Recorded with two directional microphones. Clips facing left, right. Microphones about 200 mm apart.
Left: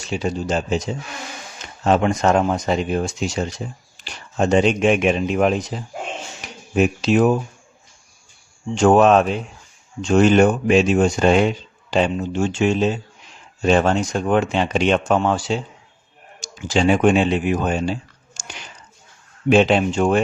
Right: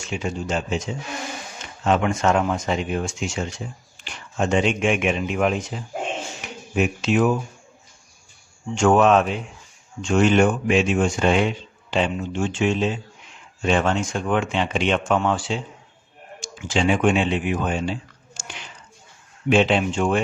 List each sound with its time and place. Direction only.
0.0 s a man's voice: 35° left (ahead or behind)
6.4 s a sound: 35° left (ahead or behind)
6.7 s a man's voice: 35° left (ahead or behind)
8.7 s a man's voice: 35° left (ahead or behind)
19.5 s a man's voice: 40° left (ahead or behind)